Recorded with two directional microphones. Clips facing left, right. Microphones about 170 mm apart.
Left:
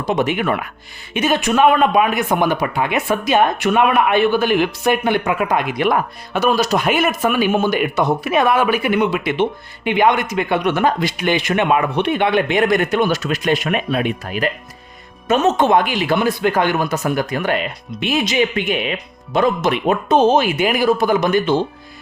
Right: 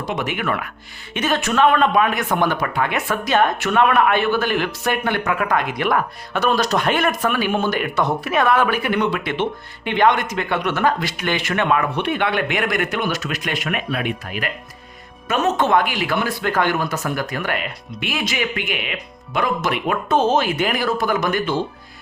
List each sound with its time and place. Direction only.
0.1 s speech: 25° left (ahead or behind)
15.3 s speech: 20° left (ahead or behind)